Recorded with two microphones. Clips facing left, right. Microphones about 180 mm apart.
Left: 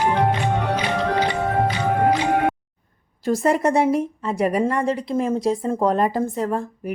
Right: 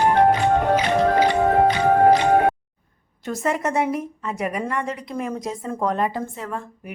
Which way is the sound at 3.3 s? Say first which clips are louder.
Left 5 dB; 35° left (ahead or behind).